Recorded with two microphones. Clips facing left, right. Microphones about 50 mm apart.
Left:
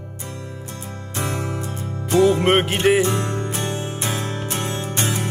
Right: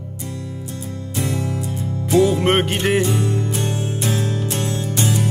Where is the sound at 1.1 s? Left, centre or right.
Left.